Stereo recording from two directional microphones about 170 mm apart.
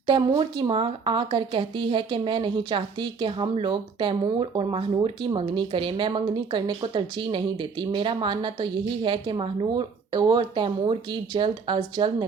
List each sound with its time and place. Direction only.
0.1 s speech: 30° right (ahead or behind)